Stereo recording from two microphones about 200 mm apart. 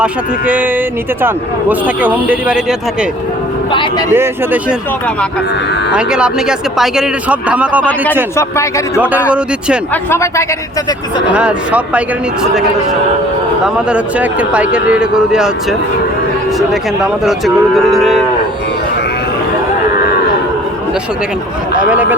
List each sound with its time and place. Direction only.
0.0 s speech: 5° right (ahead or behind)
2.0 s speech: 10° right (ahead or behind)
3.7 s speech: 25° left (ahead or behind)
4.1 s speech: 10° right (ahead or behind)
5.9 s speech: 5° right (ahead or behind)
9.9 s speech: 15° left (ahead or behind)
11.3 s speech: 5° right (ahead or behind)
13.9 s speech: 5° right (ahead or behind)
16.6 s speech: centre (ahead or behind)